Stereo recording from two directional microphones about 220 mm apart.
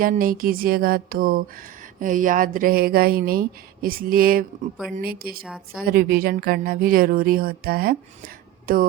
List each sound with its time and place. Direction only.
0.0 s speech: 40° right (ahead or behind)